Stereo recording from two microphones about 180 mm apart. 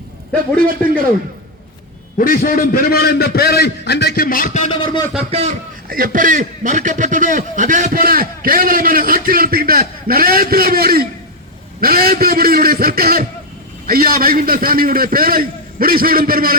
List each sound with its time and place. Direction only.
0.8 s a man's voice: 5° left (ahead or behind)
2.1 s a man's voice: 50° left (ahead or behind)
4.6 s speech: 25° left (ahead or behind)
5.3 s a man's voice: 35° right (ahead or behind)
5.9 s a man's voice: 50° right (ahead or behind)